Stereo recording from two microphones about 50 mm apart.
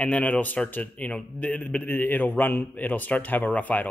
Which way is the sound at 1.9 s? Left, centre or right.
Left.